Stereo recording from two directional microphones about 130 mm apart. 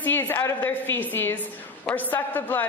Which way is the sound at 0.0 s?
15° left (ahead or behind).